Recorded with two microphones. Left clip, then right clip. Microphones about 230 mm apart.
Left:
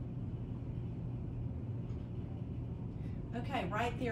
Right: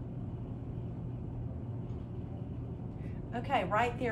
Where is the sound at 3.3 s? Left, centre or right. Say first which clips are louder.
Right 7 dB; centre.